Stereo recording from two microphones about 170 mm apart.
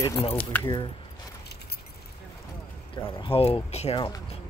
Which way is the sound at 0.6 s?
30° left (ahead or behind).